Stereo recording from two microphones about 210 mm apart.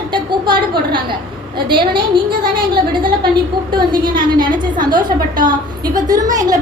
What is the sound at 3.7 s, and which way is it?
A child's voice, 20° right (ahead or behind).